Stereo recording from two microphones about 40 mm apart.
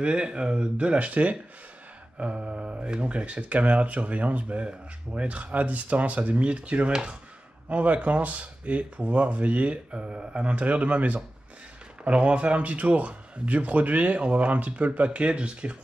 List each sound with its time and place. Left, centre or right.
0.0 s speech: right
7.7 s speech: right
9.9 s speech: right